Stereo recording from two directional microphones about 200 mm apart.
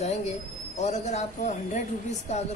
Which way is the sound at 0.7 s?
35° left (ahead or behind).